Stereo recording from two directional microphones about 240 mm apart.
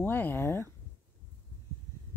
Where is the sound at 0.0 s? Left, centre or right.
Centre.